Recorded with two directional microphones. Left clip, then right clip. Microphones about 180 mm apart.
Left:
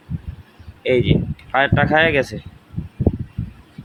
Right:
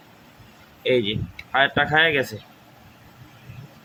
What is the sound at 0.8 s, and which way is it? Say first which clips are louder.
Speech: left 4 dB; 40° left (ahead or behind).